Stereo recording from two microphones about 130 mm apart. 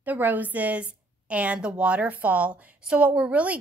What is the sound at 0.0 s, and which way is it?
A woman's voice, 15° right (ahead or behind).